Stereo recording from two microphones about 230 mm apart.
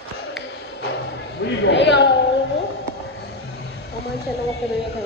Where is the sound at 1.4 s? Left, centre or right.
Left.